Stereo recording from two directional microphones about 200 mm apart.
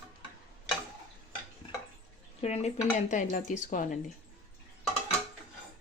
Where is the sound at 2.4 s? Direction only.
30° left (ahead or behind).